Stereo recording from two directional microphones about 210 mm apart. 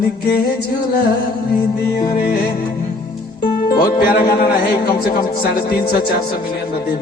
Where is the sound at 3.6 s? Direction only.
45° left (ahead or behind).